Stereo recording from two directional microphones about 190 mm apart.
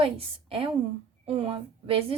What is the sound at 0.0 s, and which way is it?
A woman's voice, 30° right (ahead or behind).